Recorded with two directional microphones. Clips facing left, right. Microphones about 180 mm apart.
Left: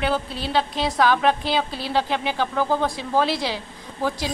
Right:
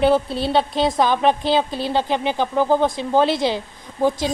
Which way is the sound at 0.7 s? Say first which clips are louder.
Right 2 dB; 20° right (ahead or behind).